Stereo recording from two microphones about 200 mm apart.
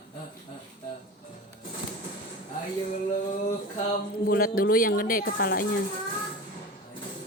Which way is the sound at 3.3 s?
40° left (ahead or behind).